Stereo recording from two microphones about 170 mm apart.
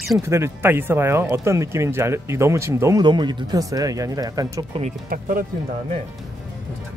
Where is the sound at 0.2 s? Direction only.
15° right (ahead or behind).